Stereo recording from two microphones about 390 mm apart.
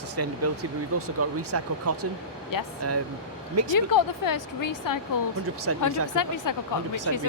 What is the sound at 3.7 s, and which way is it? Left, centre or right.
Speech, left.